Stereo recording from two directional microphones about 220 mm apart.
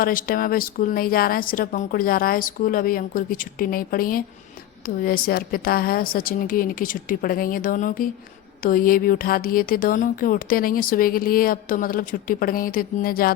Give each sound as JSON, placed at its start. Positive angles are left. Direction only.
{"t": 0.0, "sound": "speech", "side_deg": 40}